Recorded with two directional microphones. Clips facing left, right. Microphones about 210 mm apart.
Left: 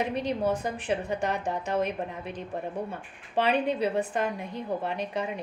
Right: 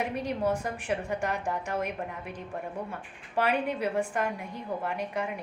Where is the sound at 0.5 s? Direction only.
20° left (ahead or behind).